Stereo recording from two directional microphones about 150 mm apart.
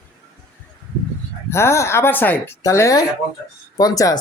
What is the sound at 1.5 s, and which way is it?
Speech, 15° left (ahead or behind).